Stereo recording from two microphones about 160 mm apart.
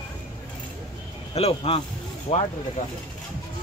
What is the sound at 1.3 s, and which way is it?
Speech, 40° left (ahead or behind).